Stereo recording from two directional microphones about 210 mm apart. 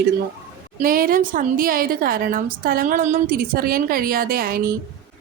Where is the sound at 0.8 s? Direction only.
45° right (ahead or behind).